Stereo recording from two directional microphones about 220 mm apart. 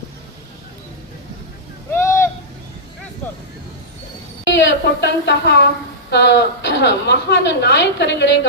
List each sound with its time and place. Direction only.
1.9 s owl: 10° left (ahead or behind)
4.4 s a woman's voice: 55° left (ahead or behind)